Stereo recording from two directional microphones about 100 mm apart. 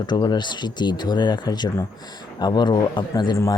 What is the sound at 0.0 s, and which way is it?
A man's voice, 45° left (ahead or behind).